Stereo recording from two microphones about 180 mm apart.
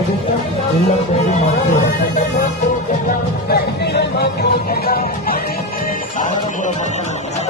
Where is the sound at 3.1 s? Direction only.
65° left (ahead or behind); by 6.7 s 45° left (ahead or behind).